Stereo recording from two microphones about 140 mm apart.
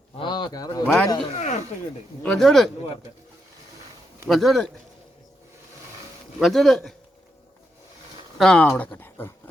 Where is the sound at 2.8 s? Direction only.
40° left (ahead or behind).